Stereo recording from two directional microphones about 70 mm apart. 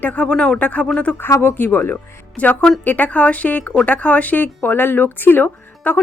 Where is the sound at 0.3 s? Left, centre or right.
Centre; by 2.2 s left.